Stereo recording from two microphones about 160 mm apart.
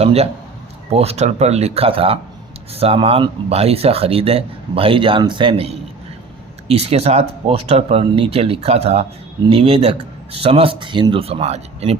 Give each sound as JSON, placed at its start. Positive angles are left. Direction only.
{"t": 0.0, "sound": "speech", "side_deg": -40}